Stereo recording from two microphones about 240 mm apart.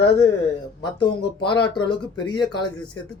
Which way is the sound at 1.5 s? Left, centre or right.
Centre.